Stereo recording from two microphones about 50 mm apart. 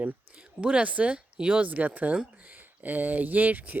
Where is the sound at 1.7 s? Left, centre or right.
Right.